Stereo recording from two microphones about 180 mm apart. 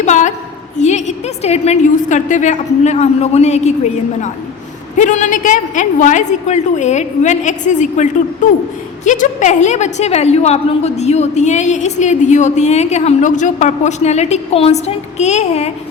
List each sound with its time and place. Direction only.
0.0 s a sound: 40° left (ahead or behind)
0.8 s a woman's voice: 40° left (ahead or behind)
4.9 s a woman's voice: 45° left (ahead or behind)